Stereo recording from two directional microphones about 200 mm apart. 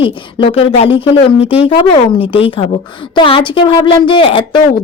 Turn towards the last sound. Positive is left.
turn(degrees=25)  # may be behind; listen again after turning